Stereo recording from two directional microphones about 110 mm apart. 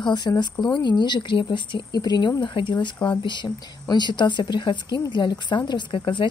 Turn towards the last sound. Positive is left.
turn(degrees=50)  # may be behind; listen again after turning